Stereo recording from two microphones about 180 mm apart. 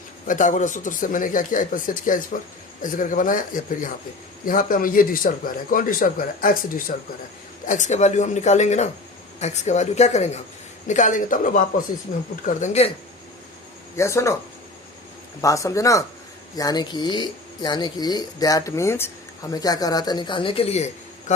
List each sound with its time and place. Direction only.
0.3 s speech: 45° left (ahead or behind)
13.9 s speech: 15° left (ahead or behind)
15.4 s speech: 15° left (ahead or behind); by 21.3 s 40° left (ahead or behind)